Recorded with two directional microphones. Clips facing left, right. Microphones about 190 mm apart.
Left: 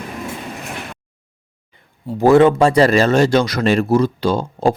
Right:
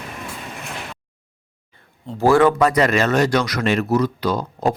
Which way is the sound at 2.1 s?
20° left (ahead or behind).